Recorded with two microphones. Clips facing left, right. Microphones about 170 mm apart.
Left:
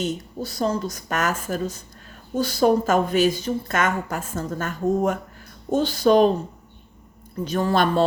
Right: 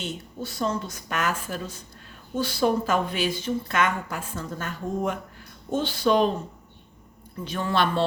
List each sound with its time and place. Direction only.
0.0 s a woman's voice: 40° left (ahead or behind)
7.3 s a woman's voice: 40° left (ahead or behind)